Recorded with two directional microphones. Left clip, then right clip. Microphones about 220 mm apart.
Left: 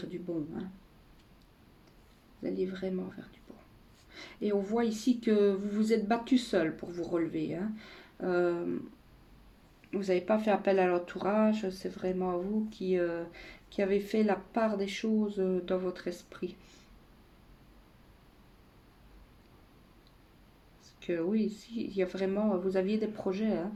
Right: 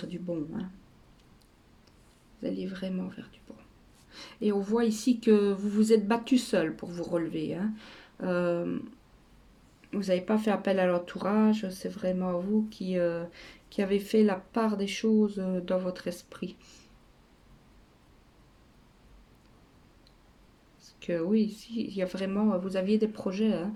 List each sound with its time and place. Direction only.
2.4 s speech: 45° right (ahead or behind)
4.1 s speech: 45° right (ahead or behind)
9.9 s speech: 45° right (ahead or behind)
21.0 s speech: 45° right (ahead or behind)